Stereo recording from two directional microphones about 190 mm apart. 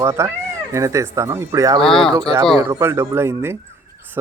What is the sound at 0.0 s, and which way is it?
Speech, 15° right (ahead or behind).